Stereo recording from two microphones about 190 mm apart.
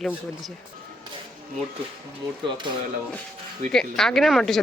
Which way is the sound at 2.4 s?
25° right (ahead or behind).